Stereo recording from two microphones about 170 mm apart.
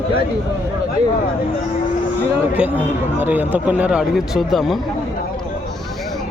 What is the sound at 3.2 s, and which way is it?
Speech, 10° right (ahead or behind).